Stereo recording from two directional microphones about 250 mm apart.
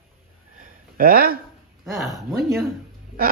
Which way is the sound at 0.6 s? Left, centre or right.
Right.